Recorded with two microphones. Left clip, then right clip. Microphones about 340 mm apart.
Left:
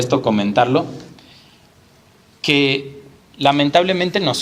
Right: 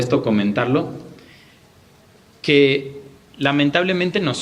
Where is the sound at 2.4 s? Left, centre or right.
Centre.